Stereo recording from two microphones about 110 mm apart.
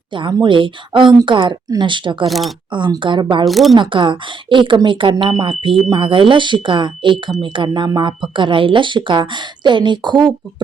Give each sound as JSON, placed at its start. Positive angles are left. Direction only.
{"t": 0.1, "sound": "speech", "side_deg": -45}
{"t": 2.2, "sound": "speech", "side_deg": 0}
{"t": 2.6, "sound": "speech", "side_deg": -45}
{"t": 3.4, "sound": "speech", "side_deg": 0}
{"t": 3.8, "sound": "speech", "side_deg": -50}